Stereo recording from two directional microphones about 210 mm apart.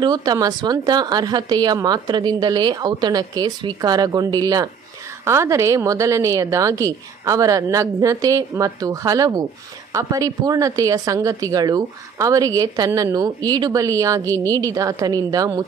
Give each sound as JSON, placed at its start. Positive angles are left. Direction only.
{"t": 0.0, "sound": "a woman's voice", "side_deg": -20}